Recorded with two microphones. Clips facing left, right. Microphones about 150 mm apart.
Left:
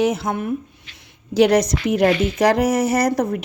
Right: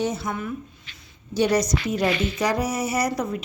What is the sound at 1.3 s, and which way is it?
Speech, 85° left.